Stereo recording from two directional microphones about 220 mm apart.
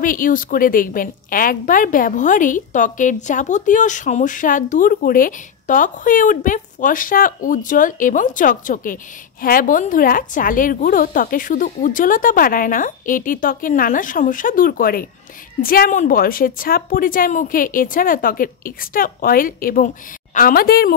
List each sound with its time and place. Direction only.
0.0 s a woman's voice: 40° left (ahead or behind)